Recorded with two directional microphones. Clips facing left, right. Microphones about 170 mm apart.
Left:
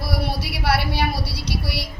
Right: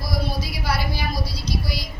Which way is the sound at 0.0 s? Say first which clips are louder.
Left 1 dB; 70° left (ahead or behind).